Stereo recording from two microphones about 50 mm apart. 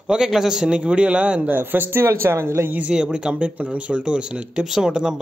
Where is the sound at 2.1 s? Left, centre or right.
Right.